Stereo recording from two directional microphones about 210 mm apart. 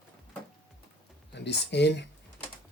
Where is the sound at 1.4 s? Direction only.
55° left (ahead or behind).